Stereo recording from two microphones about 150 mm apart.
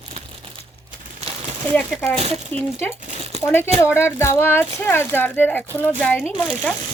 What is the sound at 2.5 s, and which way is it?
Speech, 10° left (ahead or behind).